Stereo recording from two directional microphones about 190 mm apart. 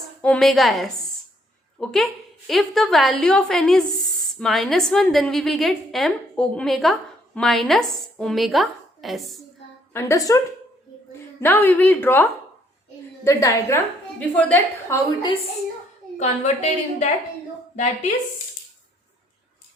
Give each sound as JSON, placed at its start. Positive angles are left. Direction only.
{"t": 0.2, "sound": "a woman's voice", "side_deg": 5}
{"t": 9.9, "sound": "a woman's voice", "side_deg": 15}
{"t": 16.1, "sound": "a woman's voice", "side_deg": 35}